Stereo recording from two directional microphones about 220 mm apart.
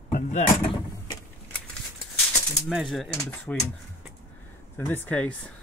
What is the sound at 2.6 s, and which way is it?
Speech, centre (ahead or behind).